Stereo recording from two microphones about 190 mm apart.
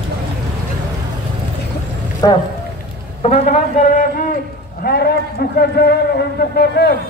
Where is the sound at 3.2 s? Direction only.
35° left (ahead or behind).